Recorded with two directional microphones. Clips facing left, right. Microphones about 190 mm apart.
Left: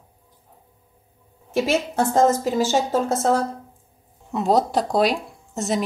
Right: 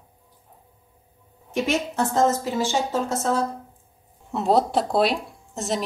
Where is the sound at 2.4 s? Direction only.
40° left (ahead or behind).